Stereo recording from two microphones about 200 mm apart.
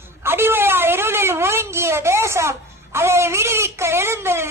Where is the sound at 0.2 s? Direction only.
10° right (ahead or behind).